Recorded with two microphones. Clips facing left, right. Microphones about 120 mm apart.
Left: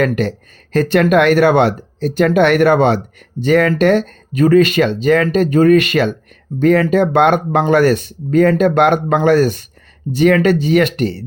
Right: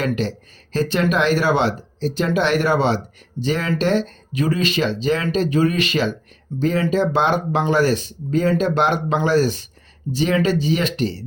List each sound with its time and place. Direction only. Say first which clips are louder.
0.0 s speech: left 6 dB; 55° left (ahead or behind)